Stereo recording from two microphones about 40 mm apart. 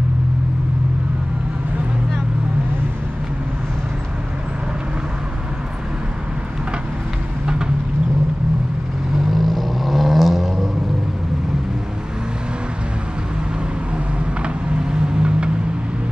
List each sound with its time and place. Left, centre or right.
7.4 s vehicle: right
9.3 s vehicle: centre
13.9 s vehicle: right